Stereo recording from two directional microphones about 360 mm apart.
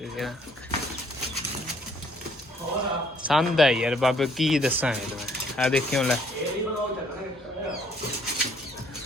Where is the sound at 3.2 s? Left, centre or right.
Centre.